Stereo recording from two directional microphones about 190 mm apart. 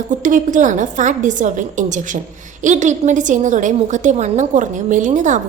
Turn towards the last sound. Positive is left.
turn(degrees=-40)  # may be behind; listen again after turning